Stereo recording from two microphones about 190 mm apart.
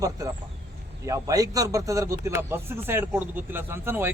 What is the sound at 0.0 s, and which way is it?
Speech, 15° right (ahead or behind).